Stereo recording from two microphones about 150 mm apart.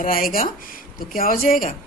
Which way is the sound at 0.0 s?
70° left (ahead or behind).